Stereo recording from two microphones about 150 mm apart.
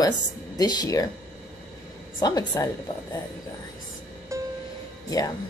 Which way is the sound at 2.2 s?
25° left (ahead or behind).